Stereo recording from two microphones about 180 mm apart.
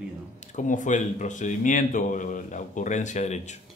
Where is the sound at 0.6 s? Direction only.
45° left (ahead or behind).